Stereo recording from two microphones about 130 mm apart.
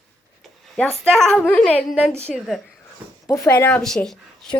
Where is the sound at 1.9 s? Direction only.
Centre (ahead or behind).